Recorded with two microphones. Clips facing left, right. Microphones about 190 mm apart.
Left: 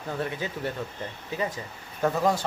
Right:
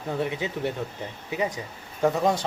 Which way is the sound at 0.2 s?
15° right (ahead or behind).